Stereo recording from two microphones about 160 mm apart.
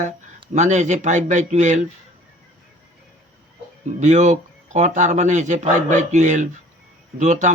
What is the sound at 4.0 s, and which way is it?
A man's voice, 45° right (ahead or behind).